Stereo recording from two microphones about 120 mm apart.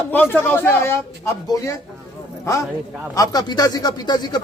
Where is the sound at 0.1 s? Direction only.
15° left (ahead or behind); by 1.7 s 30° left (ahead or behind).